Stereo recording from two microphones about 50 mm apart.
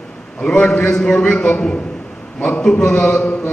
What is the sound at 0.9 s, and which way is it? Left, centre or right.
Chant, left.